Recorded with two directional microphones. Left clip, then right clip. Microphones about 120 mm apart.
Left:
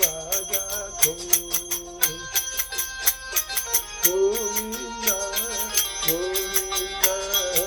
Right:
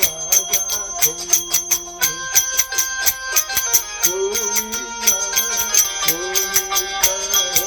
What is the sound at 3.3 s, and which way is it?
Music, 45° right (ahead or behind).